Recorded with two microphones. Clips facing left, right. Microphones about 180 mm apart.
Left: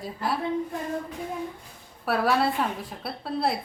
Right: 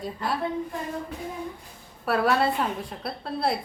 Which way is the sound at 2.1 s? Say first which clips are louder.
Right 1 dB; centre (ahead or behind).